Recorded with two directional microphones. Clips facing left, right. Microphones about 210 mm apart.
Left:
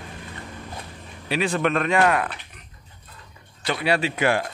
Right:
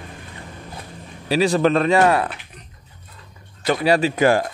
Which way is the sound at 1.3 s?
35° right (ahead or behind).